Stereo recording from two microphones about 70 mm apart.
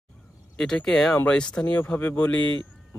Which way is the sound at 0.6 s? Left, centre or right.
Centre.